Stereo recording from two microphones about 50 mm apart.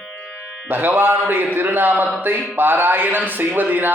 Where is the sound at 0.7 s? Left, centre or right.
Right.